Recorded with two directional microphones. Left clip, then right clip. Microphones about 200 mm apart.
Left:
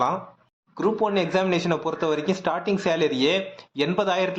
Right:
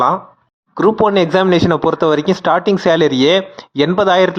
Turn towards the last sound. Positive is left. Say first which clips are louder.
# right 11 dB
turn(degrees=-40)  # may be behind; listen again after turning